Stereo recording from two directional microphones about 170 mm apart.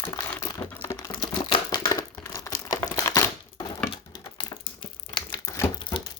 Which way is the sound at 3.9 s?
30° left (ahead or behind).